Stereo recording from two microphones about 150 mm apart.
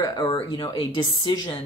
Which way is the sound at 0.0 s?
30° left (ahead or behind).